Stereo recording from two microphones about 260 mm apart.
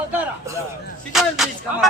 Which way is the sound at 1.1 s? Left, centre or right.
Centre.